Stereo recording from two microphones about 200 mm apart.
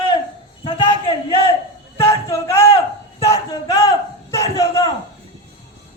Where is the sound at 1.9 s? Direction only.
15° left (ahead or behind).